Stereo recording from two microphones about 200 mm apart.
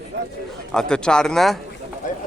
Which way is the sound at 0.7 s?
5° left (ahead or behind).